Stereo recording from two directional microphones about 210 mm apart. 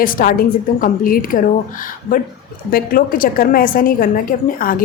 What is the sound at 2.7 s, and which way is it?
A woman's voice, 45° left (ahead or behind).